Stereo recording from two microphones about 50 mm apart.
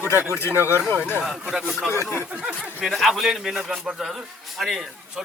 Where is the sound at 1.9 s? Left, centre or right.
Left.